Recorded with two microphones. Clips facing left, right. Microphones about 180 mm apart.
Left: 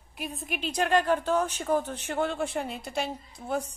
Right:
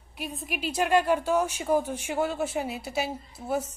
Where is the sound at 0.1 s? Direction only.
Centre (ahead or behind).